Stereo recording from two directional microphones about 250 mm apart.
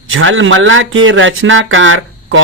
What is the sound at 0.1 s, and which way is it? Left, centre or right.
A man's voice, right.